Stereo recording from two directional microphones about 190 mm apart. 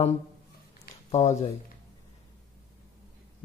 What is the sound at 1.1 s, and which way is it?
Speech, 35° left (ahead or behind).